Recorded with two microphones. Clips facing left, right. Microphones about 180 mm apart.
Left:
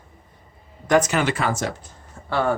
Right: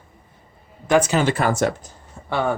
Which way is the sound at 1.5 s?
55° right (ahead or behind).